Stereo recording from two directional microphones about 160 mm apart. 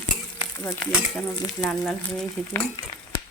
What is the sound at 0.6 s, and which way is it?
Speech, 15° left (ahead or behind).